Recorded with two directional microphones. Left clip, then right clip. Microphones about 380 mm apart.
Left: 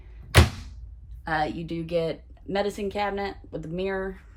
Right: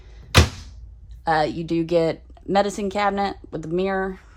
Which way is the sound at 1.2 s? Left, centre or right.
Centre.